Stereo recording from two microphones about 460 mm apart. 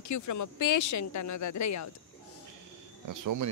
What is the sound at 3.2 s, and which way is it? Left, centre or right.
Speech, right.